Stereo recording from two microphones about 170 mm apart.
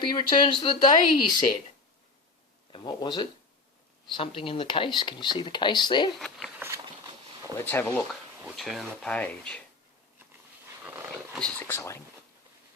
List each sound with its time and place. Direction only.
0.1 s speech: 25° left (ahead or behind)
2.7 s speech: 25° left (ahead or behind)
6.1 s speech: centre (ahead or behind)
7.4 s speech: 10° left (ahead or behind)
8.5 s speech: centre (ahead or behind)
11.3 s speech: 5° left (ahead or behind)